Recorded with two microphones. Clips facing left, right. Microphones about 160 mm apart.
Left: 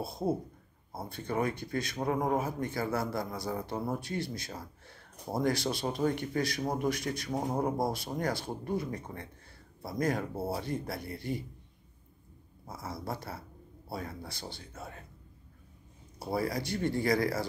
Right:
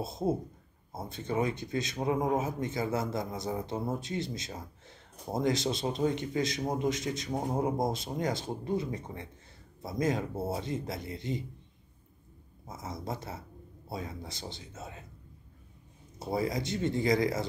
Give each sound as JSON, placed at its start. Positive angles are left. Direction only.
{"t": 0.0, "sound": "a man's voice", "side_deg": -20}
{"t": 12.6, "sound": "a man's voice", "side_deg": -20}
{"t": 16.2, "sound": "a man's voice", "side_deg": -20}